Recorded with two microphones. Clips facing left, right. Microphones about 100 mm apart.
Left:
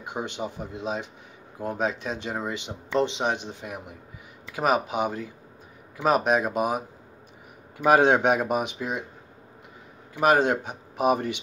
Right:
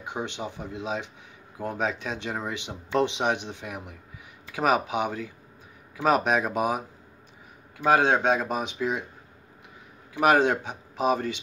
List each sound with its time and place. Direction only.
0.0 s a sound: 5° left (ahead or behind)
0.4 s speech: 5° left (ahead or behind)
7.8 s speech: 15° left (ahead or behind)
10.2 s speech: 5° left (ahead or behind)